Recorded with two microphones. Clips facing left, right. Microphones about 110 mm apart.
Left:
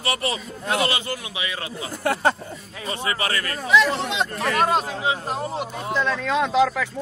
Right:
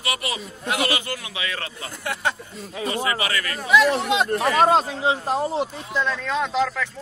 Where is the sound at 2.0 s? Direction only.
40° left (ahead or behind).